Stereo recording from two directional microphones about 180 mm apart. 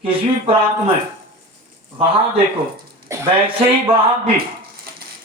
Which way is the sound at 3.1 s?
15° right (ahead or behind).